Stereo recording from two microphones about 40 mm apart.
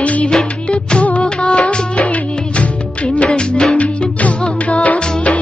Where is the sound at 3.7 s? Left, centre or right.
Left.